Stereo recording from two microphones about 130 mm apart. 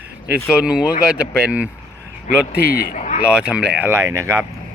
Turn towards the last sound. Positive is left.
turn(degrees=-20)  # may be behind; listen again after turning